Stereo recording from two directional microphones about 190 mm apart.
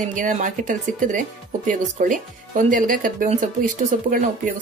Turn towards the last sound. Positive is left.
turn(degrees=-45)  # may be behind; listen again after turning